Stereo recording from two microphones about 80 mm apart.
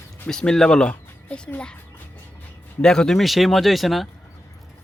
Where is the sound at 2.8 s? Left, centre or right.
Centre.